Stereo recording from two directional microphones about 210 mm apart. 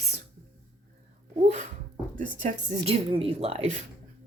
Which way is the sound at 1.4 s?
35° right (ahead or behind).